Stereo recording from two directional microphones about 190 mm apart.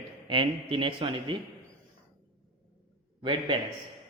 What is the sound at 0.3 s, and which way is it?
A man's voice, 25° right (ahead or behind).